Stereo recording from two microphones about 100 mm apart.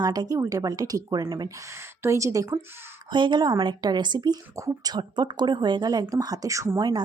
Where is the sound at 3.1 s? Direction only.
50° right (ahead or behind).